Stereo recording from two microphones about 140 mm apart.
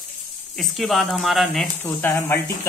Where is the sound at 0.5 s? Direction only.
Centre (ahead or behind).